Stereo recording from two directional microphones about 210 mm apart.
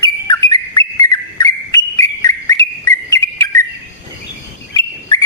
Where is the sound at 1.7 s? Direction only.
15° left (ahead or behind).